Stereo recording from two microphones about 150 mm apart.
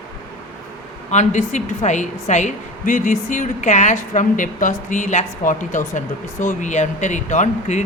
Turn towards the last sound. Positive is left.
turn(degrees=55)  # may be behind; listen again after turning